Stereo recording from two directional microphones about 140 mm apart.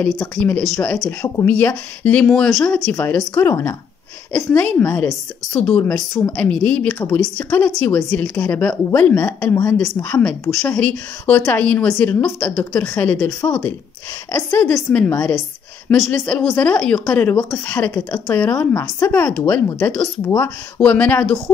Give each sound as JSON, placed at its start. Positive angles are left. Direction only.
{"t": 0.4, "sound": "a woman's voice", "side_deg": 10}
{"t": 10.5, "sound": "a woman's voice", "side_deg": 5}